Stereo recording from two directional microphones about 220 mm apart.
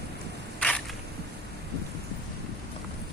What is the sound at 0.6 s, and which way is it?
Single-lens reflex camera, 5° left (ahead or behind).